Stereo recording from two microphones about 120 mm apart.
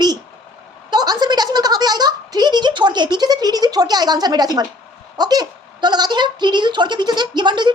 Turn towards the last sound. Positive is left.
turn(degrees=-40)  # may be behind; listen again after turning